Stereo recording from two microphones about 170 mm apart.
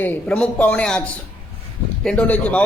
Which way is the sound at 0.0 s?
10° left (ahead or behind).